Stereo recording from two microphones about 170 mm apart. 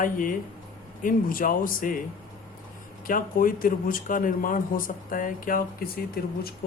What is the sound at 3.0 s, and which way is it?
Speech, 55° left (ahead or behind).